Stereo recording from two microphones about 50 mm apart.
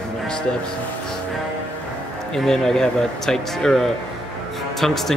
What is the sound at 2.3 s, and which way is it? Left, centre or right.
Speech, centre.